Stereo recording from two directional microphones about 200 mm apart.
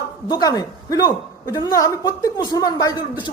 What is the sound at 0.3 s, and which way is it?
A woman's voice, 20° left (ahead or behind).